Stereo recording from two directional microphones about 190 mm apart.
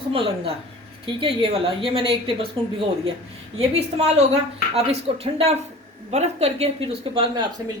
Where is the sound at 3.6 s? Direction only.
30° right (ahead or behind).